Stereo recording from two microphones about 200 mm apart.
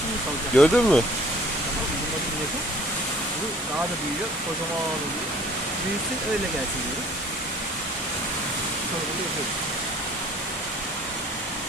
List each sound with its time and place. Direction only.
0.5 s speech: 5° left (ahead or behind)